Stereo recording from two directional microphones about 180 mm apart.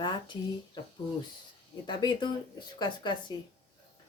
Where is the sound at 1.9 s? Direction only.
25° left (ahead or behind).